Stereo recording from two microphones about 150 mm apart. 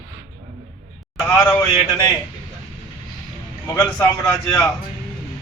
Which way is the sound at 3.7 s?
20° left (ahead or behind).